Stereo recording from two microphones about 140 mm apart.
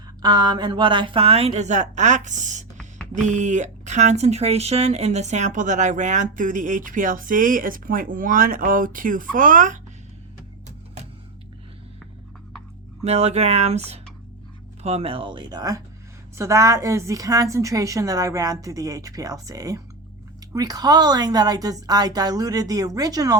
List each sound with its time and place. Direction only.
0.2 s a woman's voice: 30° right (ahead or behind); by 9.8 s 70° right (ahead or behind)
13.1 s a woman's voice: 50° right (ahead or behind); by 23.4 s 25° right (ahead or behind)